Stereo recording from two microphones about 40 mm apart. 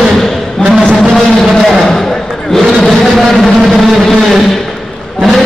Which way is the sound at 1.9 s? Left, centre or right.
Centre.